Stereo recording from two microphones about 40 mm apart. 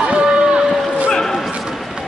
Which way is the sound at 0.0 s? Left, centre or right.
Right.